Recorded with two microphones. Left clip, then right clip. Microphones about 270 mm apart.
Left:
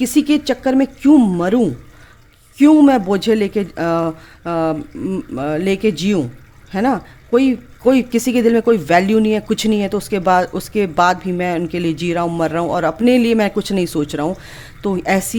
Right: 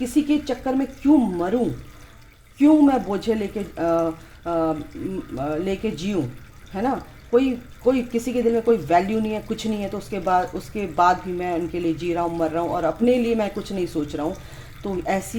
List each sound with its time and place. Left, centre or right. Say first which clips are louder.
0.0 s speech: left 6 dB; left